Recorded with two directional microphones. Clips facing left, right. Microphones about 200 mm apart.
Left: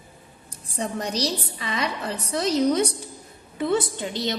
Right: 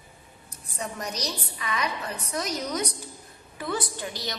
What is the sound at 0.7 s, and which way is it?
A woman's voice, 30° left (ahead or behind).